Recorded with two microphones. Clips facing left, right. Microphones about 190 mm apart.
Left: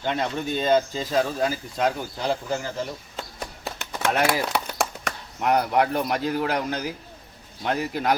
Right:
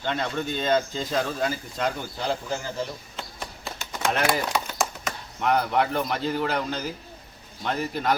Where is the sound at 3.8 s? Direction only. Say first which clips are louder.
Left 2 dB; 65° left (ahead or behind).